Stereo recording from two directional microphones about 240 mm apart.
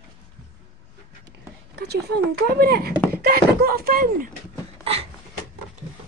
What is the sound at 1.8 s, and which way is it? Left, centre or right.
Speech, right.